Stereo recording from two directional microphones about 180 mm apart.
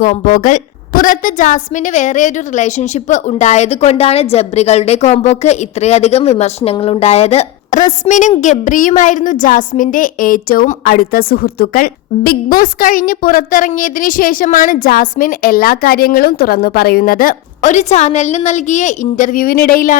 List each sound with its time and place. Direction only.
0.0 s a woman's voice: 45° left (ahead or behind)